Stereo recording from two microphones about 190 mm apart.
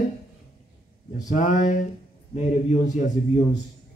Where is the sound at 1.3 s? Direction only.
40° left (ahead or behind).